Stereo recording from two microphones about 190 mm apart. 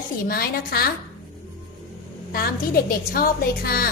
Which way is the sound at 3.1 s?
50° left (ahead or behind).